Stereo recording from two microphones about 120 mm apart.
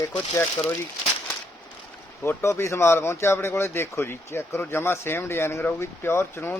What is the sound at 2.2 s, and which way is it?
Speech, 20° left (ahead or behind).